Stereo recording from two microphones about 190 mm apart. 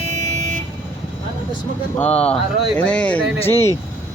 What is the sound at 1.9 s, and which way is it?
Speech, 5° left (ahead or behind).